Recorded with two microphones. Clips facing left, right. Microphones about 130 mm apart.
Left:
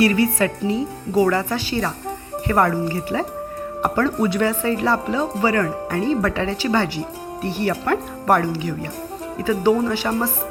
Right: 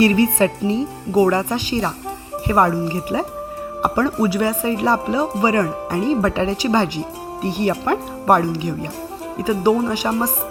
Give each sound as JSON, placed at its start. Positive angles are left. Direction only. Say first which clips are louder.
{"t": 0.0, "sound": "a woman's voice", "louder": "right 2 dB", "side_deg": -25}